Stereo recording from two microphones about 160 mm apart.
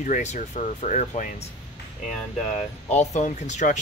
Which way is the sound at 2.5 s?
45° left (ahead or behind).